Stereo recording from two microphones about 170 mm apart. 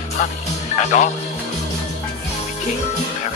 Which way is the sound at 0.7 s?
45° left (ahead or behind).